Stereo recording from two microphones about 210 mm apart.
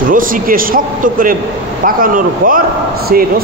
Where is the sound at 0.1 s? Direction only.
40° right (ahead or behind).